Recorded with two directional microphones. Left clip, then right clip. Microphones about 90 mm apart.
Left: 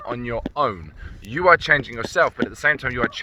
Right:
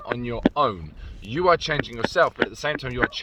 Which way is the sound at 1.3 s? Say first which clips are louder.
Left 1 dB; 60° left (ahead or behind).